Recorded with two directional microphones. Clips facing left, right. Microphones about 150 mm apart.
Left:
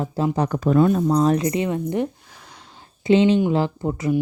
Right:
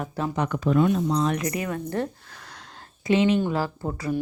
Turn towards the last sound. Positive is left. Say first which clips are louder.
# left 5 dB
turn(degrees=25)  # may be behind; listen again after turning